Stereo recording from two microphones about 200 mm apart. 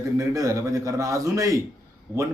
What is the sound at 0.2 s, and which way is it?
A man's voice, 15° right (ahead or behind).